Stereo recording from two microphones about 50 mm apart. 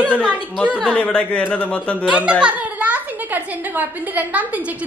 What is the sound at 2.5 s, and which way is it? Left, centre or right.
A woman's voice, right.